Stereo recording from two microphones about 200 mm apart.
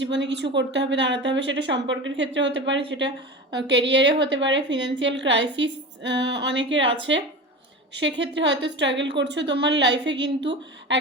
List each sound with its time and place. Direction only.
0.0 s a woman's voice: 65° right (ahead or behind)